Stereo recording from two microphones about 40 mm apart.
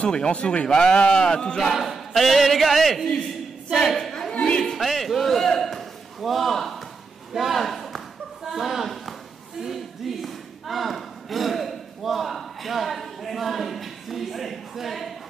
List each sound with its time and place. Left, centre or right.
0.1 s speech: left
1.7 s a sound: centre
4.3 s speech: left
4.7 s a man's voice: centre